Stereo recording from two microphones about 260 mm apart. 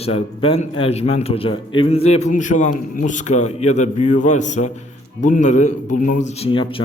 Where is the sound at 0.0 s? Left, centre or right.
Left.